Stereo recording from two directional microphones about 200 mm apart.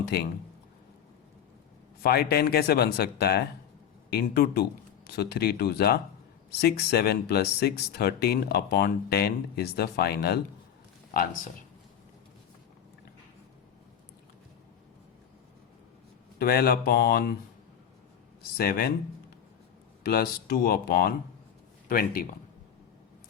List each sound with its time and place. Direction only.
0.1 s speech: 50° left (ahead or behind)
2.0 s speech: 50° left (ahead or behind)
16.4 s speech: 50° left (ahead or behind)
18.5 s speech: 50° left (ahead or behind)
20.0 s speech: 50° left (ahead or behind)